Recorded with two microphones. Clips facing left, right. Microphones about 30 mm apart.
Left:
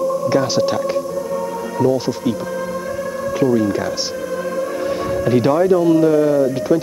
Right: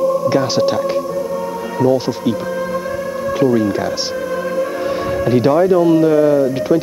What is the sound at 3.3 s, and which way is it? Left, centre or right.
Speech, centre.